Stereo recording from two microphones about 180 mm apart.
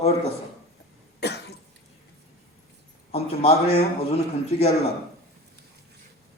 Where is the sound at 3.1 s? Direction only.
35° left (ahead or behind).